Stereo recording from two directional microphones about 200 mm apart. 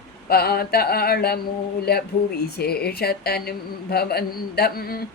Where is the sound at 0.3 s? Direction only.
50° left (ahead or behind).